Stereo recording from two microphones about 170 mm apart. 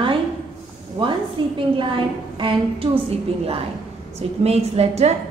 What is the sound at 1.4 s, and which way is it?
A woman's voice, 30° right (ahead or behind).